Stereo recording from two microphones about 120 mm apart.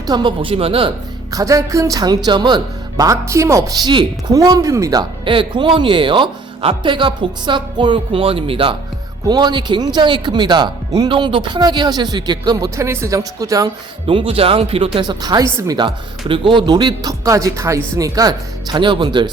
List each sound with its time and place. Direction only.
0.1 s speech: 40° right (ahead or behind)
1.3 s speech: 30° right (ahead or behind)
3.0 s speech: 25° right (ahead or behind)
5.2 s speech: 45° right (ahead or behind)
9.3 s speech: 35° right (ahead or behind)
14.1 s speech: 50° right (ahead or behind)
14.9 s speech: 35° right (ahead or behind)
16.3 s speech: 45° right (ahead or behind)